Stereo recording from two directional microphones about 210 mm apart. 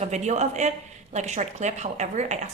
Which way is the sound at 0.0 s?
35° right (ahead or behind).